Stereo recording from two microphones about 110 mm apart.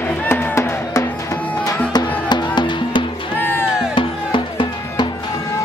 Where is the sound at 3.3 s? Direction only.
20° left (ahead or behind).